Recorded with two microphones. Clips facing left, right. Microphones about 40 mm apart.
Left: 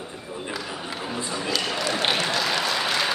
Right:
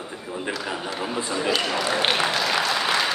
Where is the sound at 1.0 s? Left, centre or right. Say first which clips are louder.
Right 4 dB; centre.